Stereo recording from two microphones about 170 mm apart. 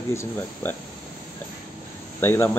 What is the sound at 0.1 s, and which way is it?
Speech, 15° left (ahead or behind).